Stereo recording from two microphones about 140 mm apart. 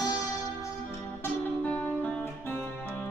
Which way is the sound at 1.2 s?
10° left (ahead or behind).